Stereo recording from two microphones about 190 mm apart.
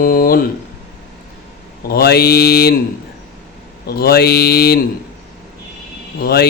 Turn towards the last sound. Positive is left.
turn(degrees=55)  # may be behind; listen again after turning